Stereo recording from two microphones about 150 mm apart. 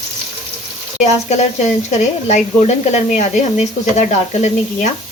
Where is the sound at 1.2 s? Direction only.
50° left (ahead or behind).